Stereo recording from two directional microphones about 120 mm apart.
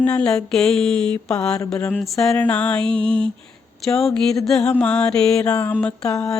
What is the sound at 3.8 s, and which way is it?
Speech, 5° left (ahead or behind).